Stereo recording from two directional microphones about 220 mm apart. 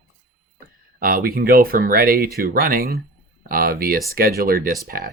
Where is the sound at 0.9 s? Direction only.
40° right (ahead or behind).